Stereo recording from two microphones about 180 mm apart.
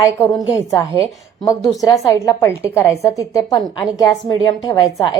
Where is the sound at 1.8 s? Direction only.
15° left (ahead or behind).